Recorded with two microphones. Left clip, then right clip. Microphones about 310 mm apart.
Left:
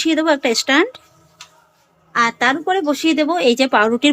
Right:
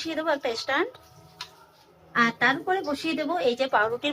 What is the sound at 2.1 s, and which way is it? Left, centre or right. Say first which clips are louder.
Speech: left 7 dB; left.